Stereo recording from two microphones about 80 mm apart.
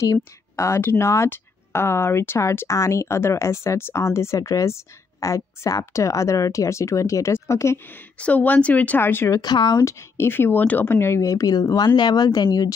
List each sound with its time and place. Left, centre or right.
0.0 s speech: left
7.8 s speech: left
9.4 s speech: left
9.8 s speech: left